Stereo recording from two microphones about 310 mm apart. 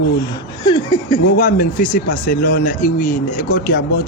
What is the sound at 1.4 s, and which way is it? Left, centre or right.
Speech, left.